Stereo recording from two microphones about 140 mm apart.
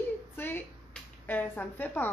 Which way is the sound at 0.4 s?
15° left (ahead or behind).